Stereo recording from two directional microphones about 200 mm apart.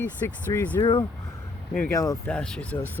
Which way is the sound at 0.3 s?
5° left (ahead or behind).